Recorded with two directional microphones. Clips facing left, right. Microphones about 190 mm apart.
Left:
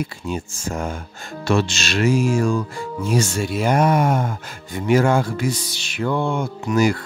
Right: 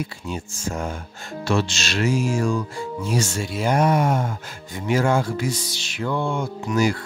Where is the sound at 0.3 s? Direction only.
55° left (ahead or behind).